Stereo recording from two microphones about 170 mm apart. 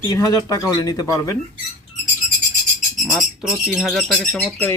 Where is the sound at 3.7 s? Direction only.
Centre (ahead or behind).